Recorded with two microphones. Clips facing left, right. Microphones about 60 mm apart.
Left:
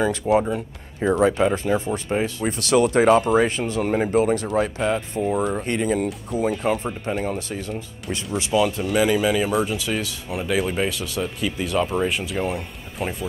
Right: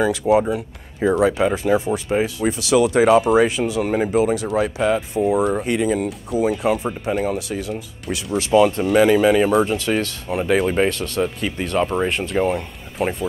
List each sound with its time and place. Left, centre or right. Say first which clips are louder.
0.0 s speech: right 3 dB; centre
8.5 s speech: right 6 dB; centre
11.2 s speech: right 2 dB; right
12.4 s speech: right 5 dB; centre